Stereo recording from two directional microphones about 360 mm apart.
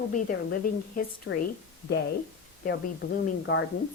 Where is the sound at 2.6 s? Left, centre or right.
Left.